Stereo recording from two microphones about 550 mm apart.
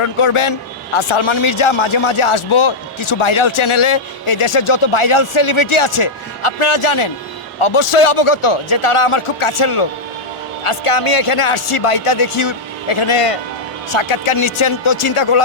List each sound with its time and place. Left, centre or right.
0.0 s a man's voice: left